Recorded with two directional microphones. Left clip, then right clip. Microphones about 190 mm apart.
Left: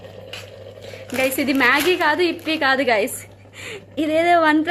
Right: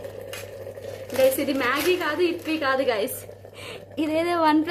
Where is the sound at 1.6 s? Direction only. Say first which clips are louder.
Left 6 dB; 35° left (ahead or behind).